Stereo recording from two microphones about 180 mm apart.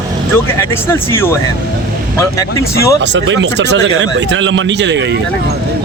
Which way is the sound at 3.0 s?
85° right.